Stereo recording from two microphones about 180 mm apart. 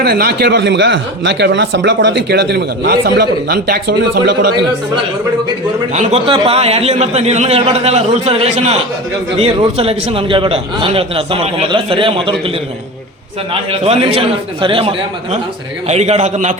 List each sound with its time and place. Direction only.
0.0 s speech: 60° right (ahead or behind)
5.9 s a man's voice: 40° right (ahead or behind)
13.5 s a man's voice: 35° right (ahead or behind)